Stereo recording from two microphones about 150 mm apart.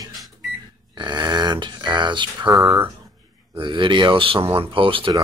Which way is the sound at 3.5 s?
35° right (ahead or behind).